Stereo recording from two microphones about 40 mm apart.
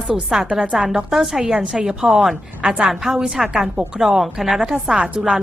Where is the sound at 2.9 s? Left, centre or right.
Centre.